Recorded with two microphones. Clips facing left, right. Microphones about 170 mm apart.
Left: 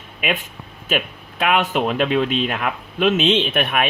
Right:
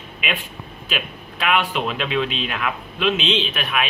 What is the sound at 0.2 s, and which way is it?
Speech, 45° left (ahead or behind).